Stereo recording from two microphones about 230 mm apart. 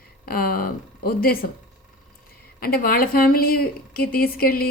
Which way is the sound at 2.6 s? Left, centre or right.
Left.